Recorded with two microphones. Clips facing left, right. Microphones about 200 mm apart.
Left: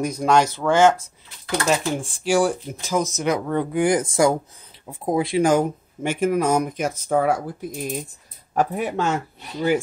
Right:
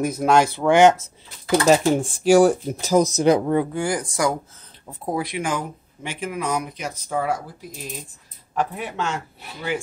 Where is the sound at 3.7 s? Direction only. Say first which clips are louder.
Left 5 dB; 20° left (ahead or behind).